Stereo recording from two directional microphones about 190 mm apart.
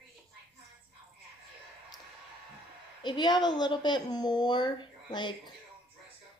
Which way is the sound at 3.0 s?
25° left (ahead or behind).